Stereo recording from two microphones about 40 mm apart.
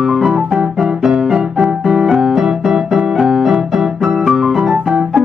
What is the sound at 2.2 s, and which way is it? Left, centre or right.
Keyboard, centre.